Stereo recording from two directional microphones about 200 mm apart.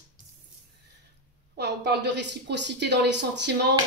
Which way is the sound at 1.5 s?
55° right (ahead or behind).